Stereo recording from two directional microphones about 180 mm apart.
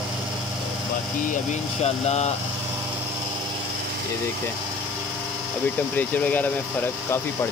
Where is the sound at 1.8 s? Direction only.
35° left (ahead or behind).